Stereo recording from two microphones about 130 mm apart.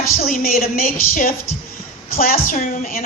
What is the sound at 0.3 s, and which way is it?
Speech, 90° left.